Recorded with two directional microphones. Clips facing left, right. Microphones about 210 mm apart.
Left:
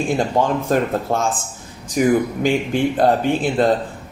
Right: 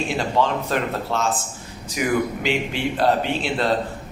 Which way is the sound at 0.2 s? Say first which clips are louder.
Left 3 dB; 50° left (ahead or behind).